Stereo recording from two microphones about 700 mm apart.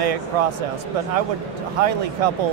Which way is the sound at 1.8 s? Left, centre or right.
Right.